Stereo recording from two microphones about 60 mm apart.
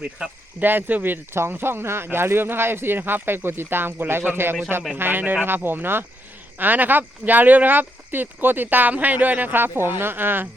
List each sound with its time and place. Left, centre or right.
0.6 s speech: right